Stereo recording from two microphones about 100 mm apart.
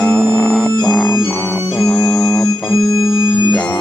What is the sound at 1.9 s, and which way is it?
Organ, 10° left (ahead or behind).